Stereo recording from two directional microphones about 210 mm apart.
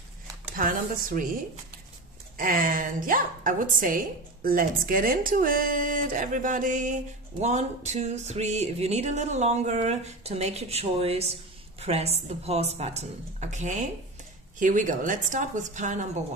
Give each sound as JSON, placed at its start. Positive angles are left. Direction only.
{"t": 0.6, "sound": "speech", "side_deg": -40}
{"t": 2.3, "sound": "a woman's voice", "side_deg": -40}